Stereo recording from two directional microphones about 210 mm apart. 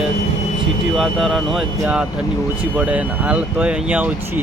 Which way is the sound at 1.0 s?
Centre (ahead or behind).